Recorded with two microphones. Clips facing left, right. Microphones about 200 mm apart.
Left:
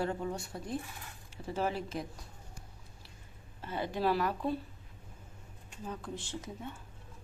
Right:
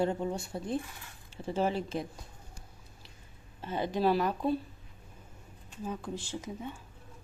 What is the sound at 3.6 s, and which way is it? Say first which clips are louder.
Speech: right 4 dB; 20° right (ahead or behind).